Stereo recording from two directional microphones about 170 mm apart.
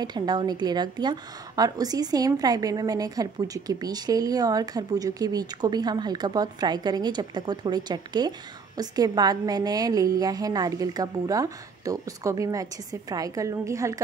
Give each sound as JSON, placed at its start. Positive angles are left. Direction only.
{"t": 0.0, "sound": "a woman's voice", "side_deg": -25}